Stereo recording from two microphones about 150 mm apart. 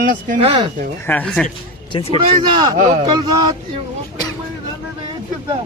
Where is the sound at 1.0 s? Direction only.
10° left (ahead or behind).